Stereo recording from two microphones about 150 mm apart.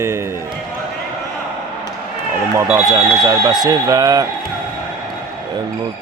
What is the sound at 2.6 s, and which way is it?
Speech, 15° right (ahead or behind).